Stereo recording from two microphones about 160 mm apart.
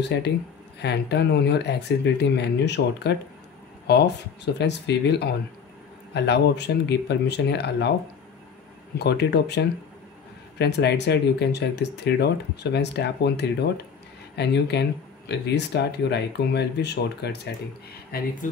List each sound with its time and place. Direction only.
0.0 s speech: 90° left
8.9 s speech: 90° left
18.1 s speech: 70° left (ahead or behind)